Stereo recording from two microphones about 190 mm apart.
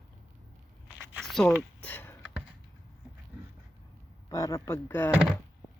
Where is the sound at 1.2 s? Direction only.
Centre (ahead or behind).